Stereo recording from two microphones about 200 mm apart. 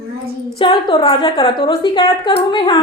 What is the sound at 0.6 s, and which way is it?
A woman's voice, 25° left (ahead or behind).